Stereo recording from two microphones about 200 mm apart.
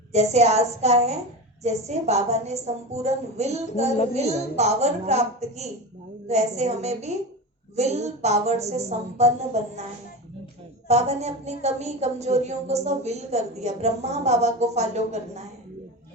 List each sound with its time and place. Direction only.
0.1 s a woman's voice: 35° right (ahead or behind)
10.8 s a woman's voice: 35° right (ahead or behind)